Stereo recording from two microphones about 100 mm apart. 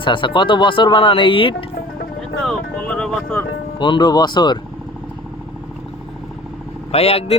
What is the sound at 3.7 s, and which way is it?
Speech, 50° left (ahead or behind).